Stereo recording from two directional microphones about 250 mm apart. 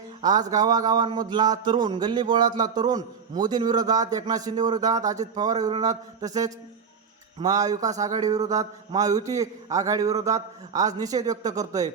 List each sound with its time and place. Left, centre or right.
0.2 s speech: centre